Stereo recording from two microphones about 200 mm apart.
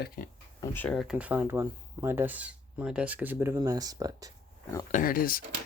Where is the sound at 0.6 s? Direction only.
10° left (ahead or behind); by 4.3 s 20° right (ahead or behind).